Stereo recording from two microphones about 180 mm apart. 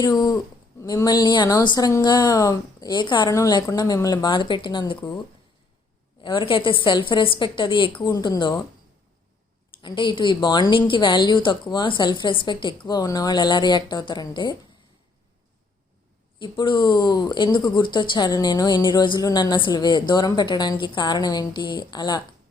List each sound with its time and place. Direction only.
0.0 s a woman's voice: 20° left (ahead or behind)
6.2 s a woman's voice: 30° left (ahead or behind)
9.8 s a woman's voice: 25° left (ahead or behind)
16.4 s a woman's voice: 25° left (ahead or behind)